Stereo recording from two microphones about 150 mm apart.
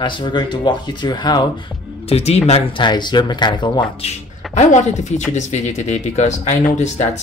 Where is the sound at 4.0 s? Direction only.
50° left (ahead or behind).